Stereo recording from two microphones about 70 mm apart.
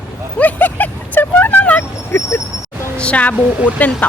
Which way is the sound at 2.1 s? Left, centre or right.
Left.